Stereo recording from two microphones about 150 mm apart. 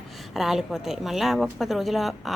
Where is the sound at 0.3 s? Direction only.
Centre (ahead or behind).